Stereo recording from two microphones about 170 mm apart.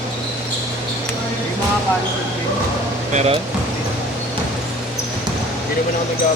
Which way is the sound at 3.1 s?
40° right (ahead or behind).